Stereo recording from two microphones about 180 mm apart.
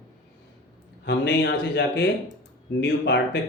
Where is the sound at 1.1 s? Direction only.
75° left (ahead or behind).